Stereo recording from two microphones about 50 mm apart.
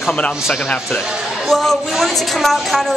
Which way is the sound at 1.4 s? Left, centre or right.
Centre.